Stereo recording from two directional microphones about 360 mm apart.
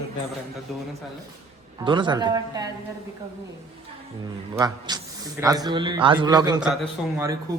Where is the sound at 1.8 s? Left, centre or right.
Centre.